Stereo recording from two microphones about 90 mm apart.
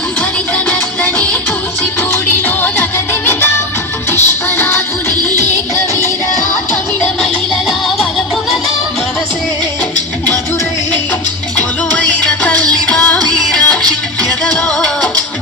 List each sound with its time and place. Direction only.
0.7 s music: 20° left (ahead or behind)
4.1 s music: 25° left (ahead or behind)
12.2 s music: 15° left (ahead or behind)